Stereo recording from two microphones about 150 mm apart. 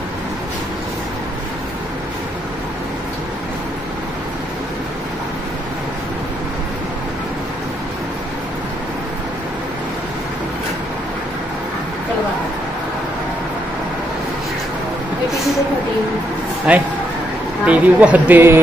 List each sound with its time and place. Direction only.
16.7 s speech: 5° right (ahead or behind)